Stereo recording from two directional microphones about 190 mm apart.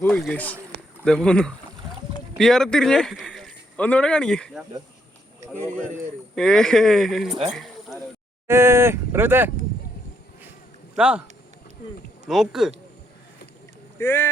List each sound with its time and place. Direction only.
0.0 s speech: centre (ahead or behind)
6.3 s speech: 5° left (ahead or behind)
7.3 s speech: 30° right (ahead or behind)
7.5 s a sound: centre (ahead or behind)
8.4 s speech: 15° right (ahead or behind)
10.9 s speech: 5° right (ahead or behind)
12.3 s speech: centre (ahead or behind)
14.0 s speech: 10° left (ahead or behind)